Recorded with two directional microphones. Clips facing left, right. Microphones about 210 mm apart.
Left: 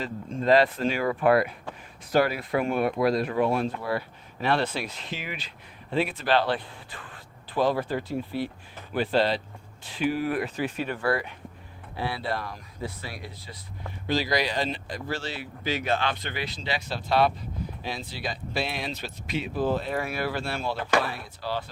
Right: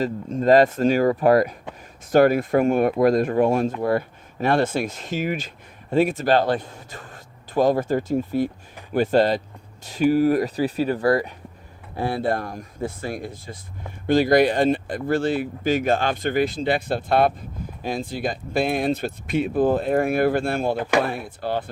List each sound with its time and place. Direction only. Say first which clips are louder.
0.0 s speech: right 7 dB; 40° right (ahead or behind)